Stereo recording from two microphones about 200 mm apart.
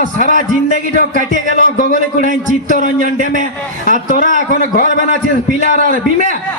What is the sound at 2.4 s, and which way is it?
A man's voice, 40° left (ahead or behind).